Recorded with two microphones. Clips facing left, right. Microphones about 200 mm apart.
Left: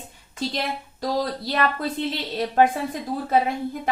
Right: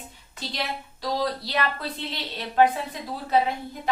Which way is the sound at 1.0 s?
50° left (ahead or behind).